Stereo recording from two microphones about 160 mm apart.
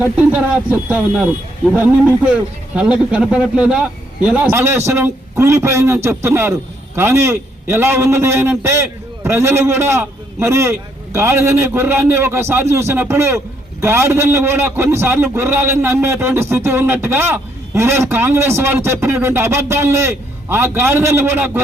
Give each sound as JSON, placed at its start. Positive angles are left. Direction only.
{"t": 0.0, "sound": "a man's voice", "side_deg": -10}